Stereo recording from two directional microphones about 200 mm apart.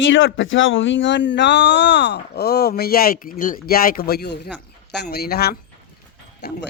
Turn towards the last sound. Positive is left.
turn(degrees=55)  # may be behind; listen again after turning